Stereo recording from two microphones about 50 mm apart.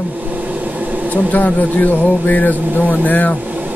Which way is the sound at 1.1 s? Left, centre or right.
Left.